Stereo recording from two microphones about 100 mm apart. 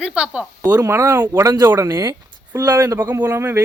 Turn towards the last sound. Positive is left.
turn(degrees=-25)  # may be behind; listen again after turning